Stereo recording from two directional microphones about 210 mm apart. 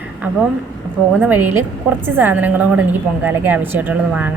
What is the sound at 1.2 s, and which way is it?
Speech, 10° right (ahead or behind).